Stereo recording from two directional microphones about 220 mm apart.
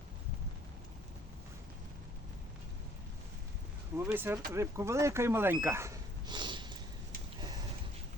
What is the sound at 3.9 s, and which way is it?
Speech, 10° right (ahead or behind).